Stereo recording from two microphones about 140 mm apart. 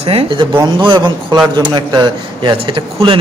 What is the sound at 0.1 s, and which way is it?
A man's voice, 40° right (ahead or behind).